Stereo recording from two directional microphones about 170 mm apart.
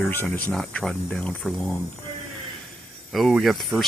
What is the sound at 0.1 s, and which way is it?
Speech, 10° left (ahead or behind).